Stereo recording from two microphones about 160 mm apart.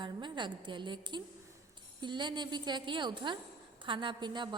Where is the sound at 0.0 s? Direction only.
30° right (ahead or behind).